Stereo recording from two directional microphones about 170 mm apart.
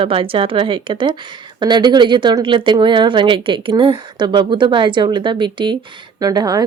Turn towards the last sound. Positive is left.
turn(degrees=-20)  # may be behind; listen again after turning